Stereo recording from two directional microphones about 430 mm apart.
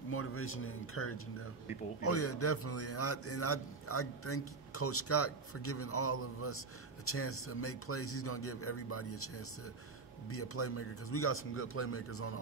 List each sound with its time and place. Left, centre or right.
0.1 s a man's voice: left